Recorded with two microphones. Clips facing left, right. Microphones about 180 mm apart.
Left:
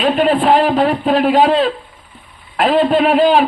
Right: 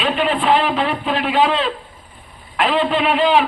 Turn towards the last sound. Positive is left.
turn(degrees=40)  # may be behind; listen again after turning